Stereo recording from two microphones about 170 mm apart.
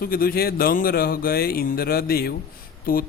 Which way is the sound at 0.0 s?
60° left (ahead or behind).